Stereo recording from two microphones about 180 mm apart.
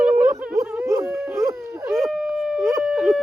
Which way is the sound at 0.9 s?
15° right (ahead or behind).